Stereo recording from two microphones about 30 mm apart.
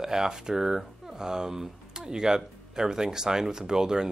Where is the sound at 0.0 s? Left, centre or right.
Centre.